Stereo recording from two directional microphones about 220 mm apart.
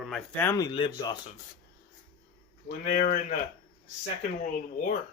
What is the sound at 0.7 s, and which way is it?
Speech, 20° left (ahead or behind).